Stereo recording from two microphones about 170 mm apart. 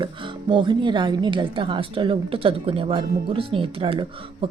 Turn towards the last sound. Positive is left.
turn(degrees=-30)  # may be behind; listen again after turning